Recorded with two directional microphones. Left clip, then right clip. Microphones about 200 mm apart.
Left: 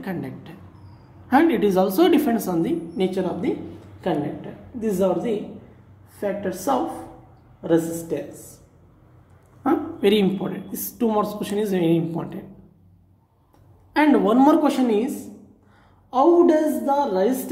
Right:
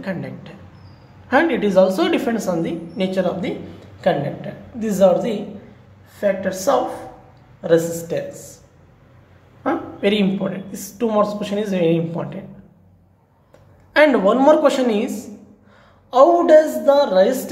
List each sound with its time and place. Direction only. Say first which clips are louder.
0.0 s speech: right 3 dB; 25° left (ahead or behind)
4.7 s a woman's voice: right 7 dB; 15° left (ahead or behind)
9.6 s speech: even; 30° left (ahead or behind)
13.9 s speech: right 4 dB; 20° left (ahead or behind)
16.1 s a woman's voice: right 5 dB; 15° left (ahead or behind)